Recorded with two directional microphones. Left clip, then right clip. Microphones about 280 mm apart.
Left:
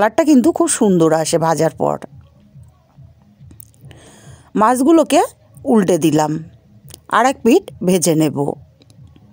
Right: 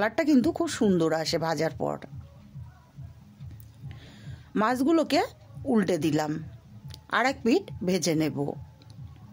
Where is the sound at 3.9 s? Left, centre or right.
Left.